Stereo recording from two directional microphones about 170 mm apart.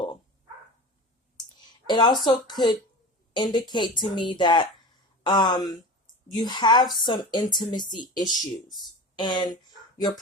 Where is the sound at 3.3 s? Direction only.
25° left (ahead or behind).